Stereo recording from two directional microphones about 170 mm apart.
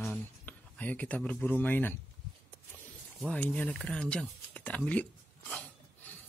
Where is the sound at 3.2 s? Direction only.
10° left (ahead or behind).